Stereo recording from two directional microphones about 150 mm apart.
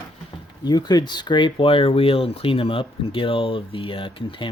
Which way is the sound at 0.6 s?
25° left (ahead or behind).